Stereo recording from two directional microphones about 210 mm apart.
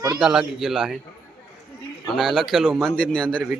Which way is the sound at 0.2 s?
Centre (ahead or behind).